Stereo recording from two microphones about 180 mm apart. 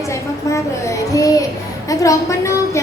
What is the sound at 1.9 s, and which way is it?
Speech, 20° left (ahead or behind).